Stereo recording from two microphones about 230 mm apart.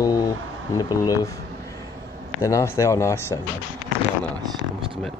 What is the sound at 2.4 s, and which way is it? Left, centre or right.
Speech, centre.